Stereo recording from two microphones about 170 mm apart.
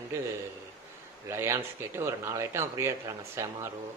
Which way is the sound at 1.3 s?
15° right (ahead or behind).